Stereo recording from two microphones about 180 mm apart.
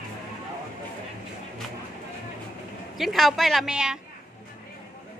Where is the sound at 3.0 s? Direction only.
Centre (ahead or behind).